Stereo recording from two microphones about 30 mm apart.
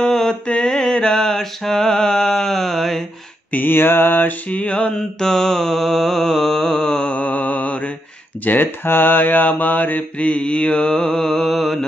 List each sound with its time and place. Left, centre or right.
0.0 s mantra: centre
0.5 s mantra: left
1.2 s mantra: centre
3.5 s mantra: left
4.5 s mantra: left
5.2 s mantra: centre
7.1 s mantra: left
8.5 s speech: left
9.1 s mantra: left
10.1 s mantra: left; by 11.4 s centre
11.4 s mantra: centre